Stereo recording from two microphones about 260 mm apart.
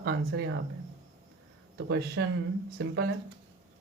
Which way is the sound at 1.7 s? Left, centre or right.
Right.